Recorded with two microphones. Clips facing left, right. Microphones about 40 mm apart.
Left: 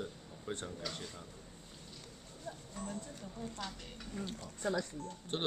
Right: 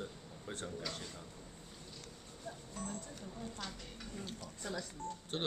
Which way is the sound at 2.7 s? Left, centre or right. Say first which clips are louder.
Left 1 dB; centre.